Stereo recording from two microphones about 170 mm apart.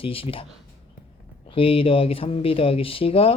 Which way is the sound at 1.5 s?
35° left (ahead or behind).